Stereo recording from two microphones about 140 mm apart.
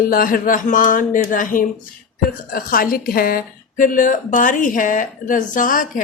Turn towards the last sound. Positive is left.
turn(degrees=70)  # may be behind; listen again after turning